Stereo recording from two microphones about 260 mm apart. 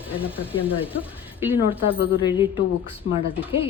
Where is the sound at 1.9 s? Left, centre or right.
Centre.